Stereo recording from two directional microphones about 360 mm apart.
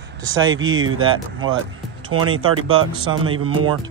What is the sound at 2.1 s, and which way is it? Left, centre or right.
Speech, right.